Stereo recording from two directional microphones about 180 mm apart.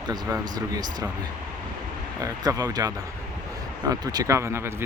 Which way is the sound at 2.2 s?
20° right (ahead or behind).